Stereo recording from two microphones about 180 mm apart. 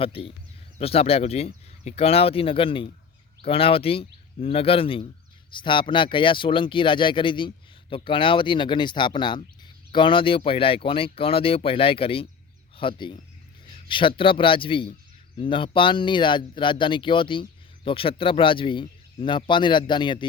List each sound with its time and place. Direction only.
0.0 s speech: 30° left (ahead or behind)